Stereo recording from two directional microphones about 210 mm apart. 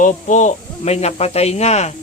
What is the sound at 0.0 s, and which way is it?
Speech, 35° left (ahead or behind).